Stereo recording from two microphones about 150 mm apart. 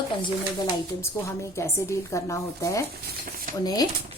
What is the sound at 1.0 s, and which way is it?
A woman's voice, 20° left (ahead or behind).